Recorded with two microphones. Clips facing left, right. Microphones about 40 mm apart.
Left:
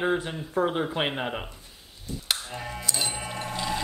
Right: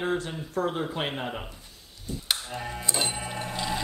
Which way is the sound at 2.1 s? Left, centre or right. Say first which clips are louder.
Even; centre.